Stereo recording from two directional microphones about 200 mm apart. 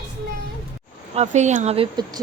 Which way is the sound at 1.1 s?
35° right (ahead or behind).